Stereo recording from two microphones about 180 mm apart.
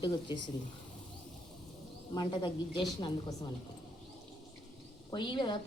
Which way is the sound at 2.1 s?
25° left (ahead or behind).